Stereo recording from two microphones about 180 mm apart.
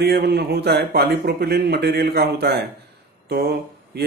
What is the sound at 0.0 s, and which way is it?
Speech, 60° right (ahead or behind).